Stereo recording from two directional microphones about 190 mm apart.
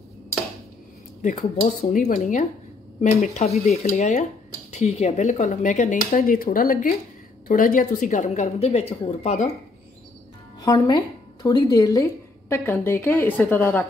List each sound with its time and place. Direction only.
1.2 s speech: 40° left (ahead or behind)
10.6 s a woman's voice: 20° left (ahead or behind)